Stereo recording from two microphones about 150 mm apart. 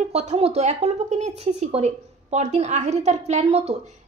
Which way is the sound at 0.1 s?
45° right (ahead or behind).